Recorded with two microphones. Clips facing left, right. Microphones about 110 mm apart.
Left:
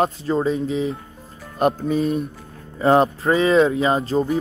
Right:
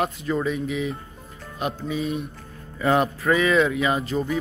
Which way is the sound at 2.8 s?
30° left (ahead or behind).